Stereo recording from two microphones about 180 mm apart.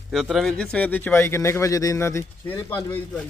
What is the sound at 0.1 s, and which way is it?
Speech, centre (ahead or behind).